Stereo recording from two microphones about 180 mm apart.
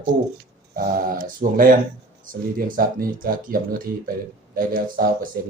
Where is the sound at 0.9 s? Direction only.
50° right (ahead or behind).